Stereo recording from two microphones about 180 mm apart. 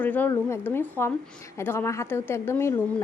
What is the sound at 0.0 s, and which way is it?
A woman's voice, 10° left (ahead or behind).